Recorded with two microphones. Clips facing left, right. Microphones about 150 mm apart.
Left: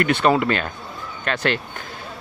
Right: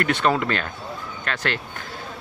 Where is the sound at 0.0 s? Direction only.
15° left (ahead or behind).